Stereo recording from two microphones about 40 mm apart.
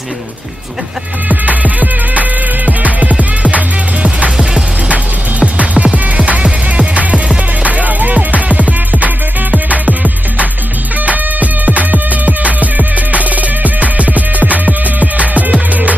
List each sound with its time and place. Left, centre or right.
1.3 s music: right
4.8 s music: right
7.6 s music: right